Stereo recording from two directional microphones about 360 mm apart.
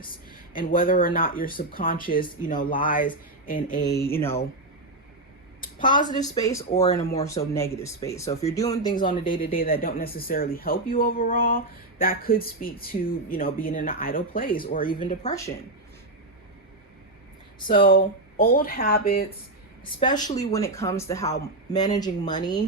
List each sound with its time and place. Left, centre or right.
0.5 s speech: left
4.1 s speech: centre
5.6 s a woman's voice: left
6.1 s speech: centre
17.7 s speech: left
20.0 s speech: centre